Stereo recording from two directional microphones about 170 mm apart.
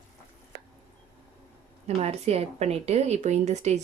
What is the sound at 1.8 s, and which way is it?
A woman's voice, 40° right (ahead or behind).